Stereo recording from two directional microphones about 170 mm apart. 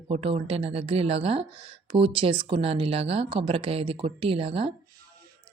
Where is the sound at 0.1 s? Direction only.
35° right (ahead or behind).